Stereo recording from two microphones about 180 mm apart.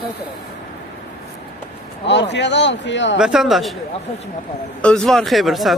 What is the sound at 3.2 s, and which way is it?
Speech, 5° right (ahead or behind).